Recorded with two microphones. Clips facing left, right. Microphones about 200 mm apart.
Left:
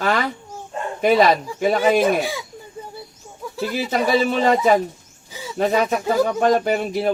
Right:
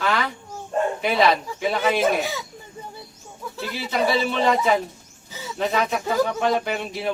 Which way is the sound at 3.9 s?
45° left (ahead or behind).